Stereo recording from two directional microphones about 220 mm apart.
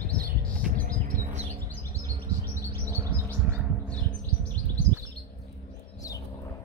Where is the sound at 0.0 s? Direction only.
40° right (ahead or behind).